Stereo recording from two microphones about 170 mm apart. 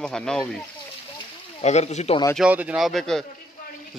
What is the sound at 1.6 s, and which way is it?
Speech, 40° left (ahead or behind).